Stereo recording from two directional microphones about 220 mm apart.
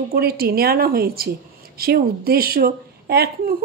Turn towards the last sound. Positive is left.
turn(degrees=-45)  # may be behind; listen again after turning